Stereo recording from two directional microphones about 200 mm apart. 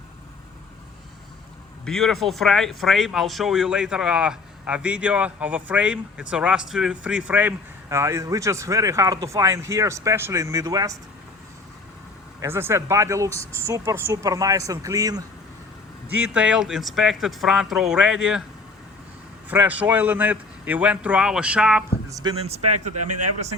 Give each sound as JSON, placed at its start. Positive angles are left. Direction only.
{"t": 1.8, "sound": "speech", "side_deg": 0}
{"t": 12.4, "sound": "speech", "side_deg": -10}
{"t": 16.0, "sound": "speech", "side_deg": -5}
{"t": 19.5, "sound": "speech", "side_deg": -10}
{"t": 22.1, "sound": "speech", "side_deg": -20}
{"t": 22.4, "sound": "speech", "side_deg": -30}